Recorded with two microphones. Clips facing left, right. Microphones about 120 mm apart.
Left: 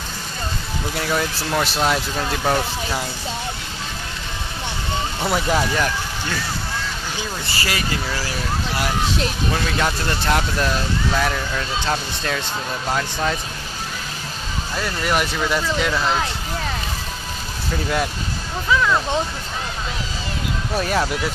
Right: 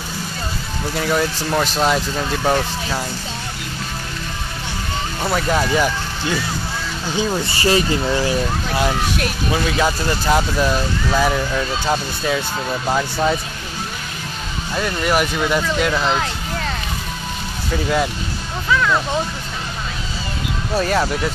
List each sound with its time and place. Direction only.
0.9 s speech: centre (ahead or behind)
5.2 s speech: centre (ahead or behind)
5.7 s speech: 10° right (ahead or behind)
7.2 s speech: 25° right (ahead or behind)
9.5 s speech: 5° right (ahead or behind)
14.8 s speech: 5° right (ahead or behind)
18.7 s music: 10° left (ahead or behind)
20.8 s speech: centre (ahead or behind)